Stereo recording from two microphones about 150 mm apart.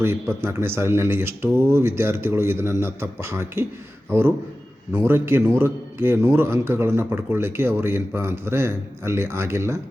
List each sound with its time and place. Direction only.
0.0 s a man's voice: 15° right (ahead or behind)
4.9 s a man's voice: 15° right (ahead or behind)